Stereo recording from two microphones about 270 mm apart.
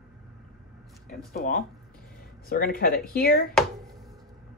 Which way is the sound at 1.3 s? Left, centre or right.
Left.